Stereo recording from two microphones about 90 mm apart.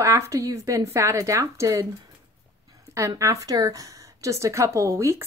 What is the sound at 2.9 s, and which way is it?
A woman's voice, 35° right (ahead or behind).